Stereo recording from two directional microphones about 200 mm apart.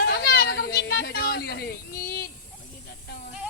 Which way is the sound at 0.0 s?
50° left (ahead or behind).